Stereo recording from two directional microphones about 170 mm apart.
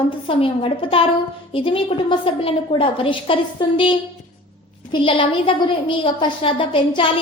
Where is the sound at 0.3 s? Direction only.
30° left (ahead or behind).